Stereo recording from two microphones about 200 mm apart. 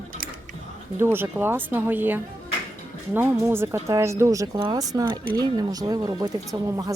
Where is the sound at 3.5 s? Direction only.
15° right (ahead or behind).